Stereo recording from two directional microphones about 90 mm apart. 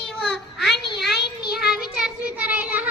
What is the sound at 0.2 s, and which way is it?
Child singing, 5° left (ahead or behind).